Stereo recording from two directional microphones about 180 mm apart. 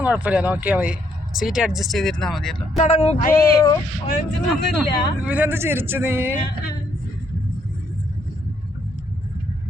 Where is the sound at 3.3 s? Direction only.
20° left (ahead or behind).